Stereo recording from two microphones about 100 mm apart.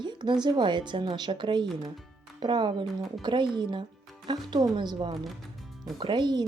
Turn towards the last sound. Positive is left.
turn(degrees=-45)  # may be behind; listen again after turning